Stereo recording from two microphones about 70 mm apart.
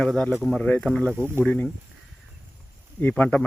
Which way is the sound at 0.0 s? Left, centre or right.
Centre.